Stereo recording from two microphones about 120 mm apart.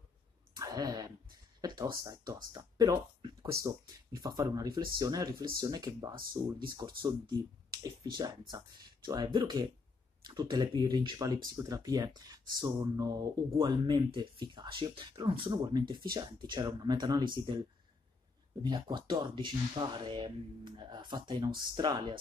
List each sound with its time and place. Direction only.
0.6 s a sound: 30° right (ahead or behind)
1.6 s speech: 35° right (ahead or behind)
18.6 s speech: 40° right (ahead or behind)